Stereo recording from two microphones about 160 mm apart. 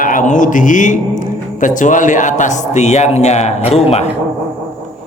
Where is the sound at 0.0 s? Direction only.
55° left (ahead or behind); by 4.0 s 40° left (ahead or behind).